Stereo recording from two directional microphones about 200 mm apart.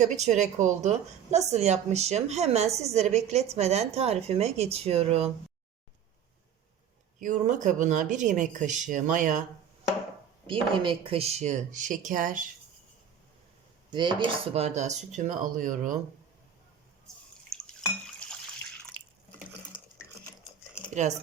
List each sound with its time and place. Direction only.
0.0 s a woman's voice: 35° right (ahead or behind)
7.2 s a woman's voice: 40° right (ahead or behind)
10.4 s a woman's voice: 25° right (ahead or behind); by 12.5 s 40° right (ahead or behind)
13.9 s a woman's voice: 20° right (ahead or behind); by 16.0 s 40° right (ahead or behind)
18.2 s water: 5° left (ahead or behind)